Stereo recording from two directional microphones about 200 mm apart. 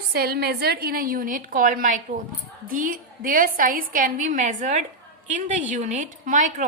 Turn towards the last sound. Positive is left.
turn(degrees=-40)  # may be behind; listen again after turning